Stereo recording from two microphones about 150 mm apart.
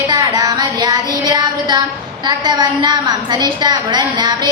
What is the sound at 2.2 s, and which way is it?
A woman's voice, 30° right (ahead or behind).